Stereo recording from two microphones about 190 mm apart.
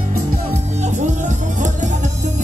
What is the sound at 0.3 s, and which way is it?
Music, 40° right (ahead or behind).